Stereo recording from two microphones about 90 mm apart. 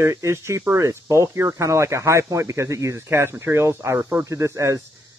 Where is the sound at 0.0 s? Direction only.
35° right (ahead or behind).